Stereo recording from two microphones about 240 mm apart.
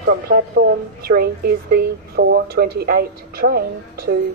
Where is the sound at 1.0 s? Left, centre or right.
Right.